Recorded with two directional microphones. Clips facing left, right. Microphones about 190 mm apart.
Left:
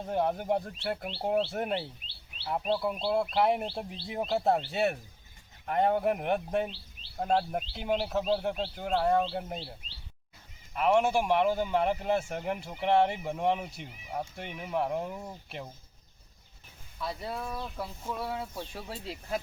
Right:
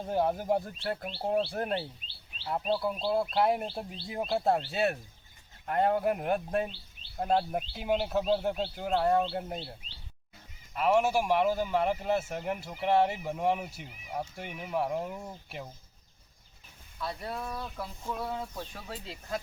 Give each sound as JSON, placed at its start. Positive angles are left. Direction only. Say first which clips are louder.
{"t": 0.0, "sound": "speech", "louder": "right 1 dB", "side_deg": -5}
{"t": 10.8, "sound": "speech", "louder": "left 1 dB", "side_deg": -5}
{"t": 17.0, "sound": "speech", "louder": "left 1 dB", "side_deg": 0}
{"t": 17.6, "sound": "a sound", "louder": "left 1 dB", "side_deg": 10}
{"t": 18.7, "sound": "speech", "louder": "left 3 dB", "side_deg": 30}